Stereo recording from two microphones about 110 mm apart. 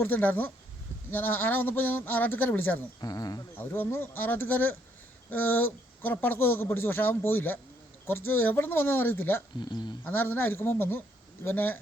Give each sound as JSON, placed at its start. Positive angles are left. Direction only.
{"t": 0.0, "sound": "a man's voice", "side_deg": 15}
{"t": 3.0, "sound": "speech", "side_deg": 35}
{"t": 3.7, "sound": "a man's voice", "side_deg": 20}
{"t": 9.6, "sound": "speech", "side_deg": 45}
{"t": 10.0, "sound": "a man's voice", "side_deg": 20}